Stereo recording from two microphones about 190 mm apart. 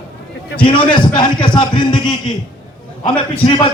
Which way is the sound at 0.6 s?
25° left (ahead or behind).